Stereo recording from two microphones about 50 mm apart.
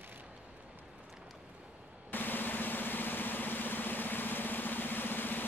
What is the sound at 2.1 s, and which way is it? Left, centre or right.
Vehicle, left.